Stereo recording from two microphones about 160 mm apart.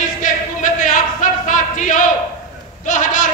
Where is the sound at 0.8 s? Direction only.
55° left (ahead or behind).